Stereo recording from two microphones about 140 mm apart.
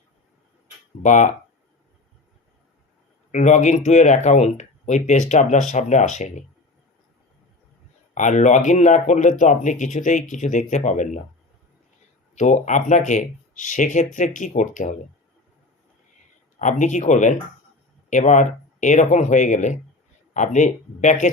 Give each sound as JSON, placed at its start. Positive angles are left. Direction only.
{"t": 1.0, "sound": "speech", "side_deg": 60}
{"t": 3.3, "sound": "speech", "side_deg": 60}
{"t": 8.1, "sound": "speech", "side_deg": 60}
{"t": 12.3, "sound": "speech", "side_deg": 60}
{"t": 16.6, "sound": "speech", "side_deg": 60}